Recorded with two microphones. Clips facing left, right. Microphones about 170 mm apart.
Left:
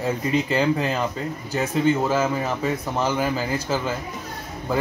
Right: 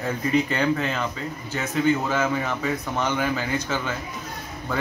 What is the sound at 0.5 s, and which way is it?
Speech, 30° left (ahead or behind).